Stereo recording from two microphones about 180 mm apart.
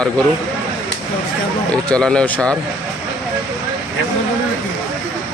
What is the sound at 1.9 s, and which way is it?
Speech, 5° left (ahead or behind).